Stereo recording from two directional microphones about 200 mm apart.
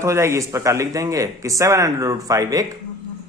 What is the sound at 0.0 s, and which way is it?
Speech, 15° right (ahead or behind).